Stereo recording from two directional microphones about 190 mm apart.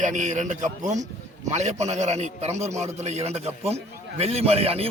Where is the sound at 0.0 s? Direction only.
40° right (ahead or behind).